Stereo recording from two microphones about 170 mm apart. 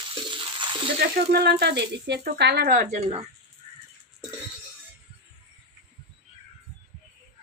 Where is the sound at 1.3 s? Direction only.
70° right (ahead or behind).